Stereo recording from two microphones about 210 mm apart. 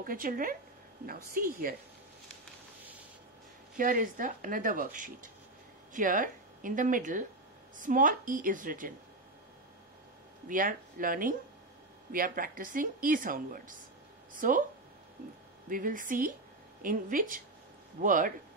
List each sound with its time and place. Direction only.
0.0 s a woman's voice: 40° right (ahead or behind)
3.7 s a woman's voice: 40° right (ahead or behind)
10.5 s a woman's voice: 40° right (ahead or behind)
15.7 s a woman's voice: 40° right (ahead or behind)